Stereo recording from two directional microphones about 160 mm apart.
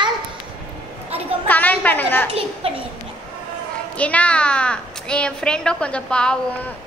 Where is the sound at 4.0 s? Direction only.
10° left (ahead or behind).